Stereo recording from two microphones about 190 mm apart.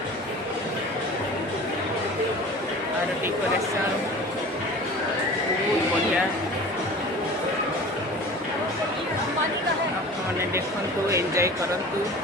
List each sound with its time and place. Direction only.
11.1 s speech: 15° right (ahead or behind)